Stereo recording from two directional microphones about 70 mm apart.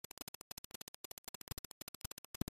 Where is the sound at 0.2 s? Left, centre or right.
Left.